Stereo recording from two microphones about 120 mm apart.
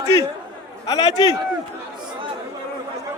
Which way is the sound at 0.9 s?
30° left (ahead or behind).